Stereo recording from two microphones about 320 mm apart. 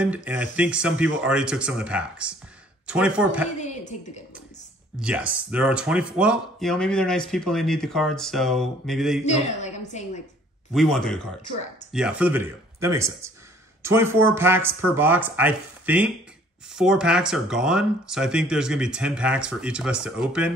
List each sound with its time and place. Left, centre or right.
0.0 s speech: centre
3.5 s a woman's voice: left
5.0 s speech: centre
9.2 s a woman's voice: left
10.7 s speech: centre